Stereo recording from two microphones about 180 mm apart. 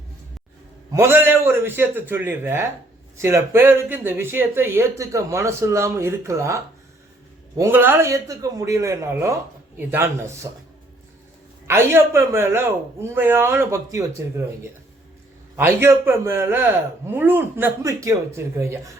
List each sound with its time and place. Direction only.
0.9 s speech: 15° right (ahead or behind)
11.7 s speech: 15° right (ahead or behind)
15.5 s speech: 15° right (ahead or behind)